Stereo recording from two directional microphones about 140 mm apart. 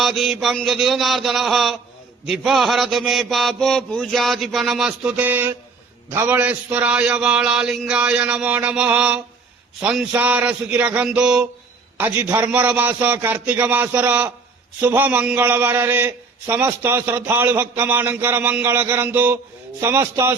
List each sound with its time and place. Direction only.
0.0 s mantra: centre (ahead or behind)
6.1 s a man's voice: 15° right (ahead or behind)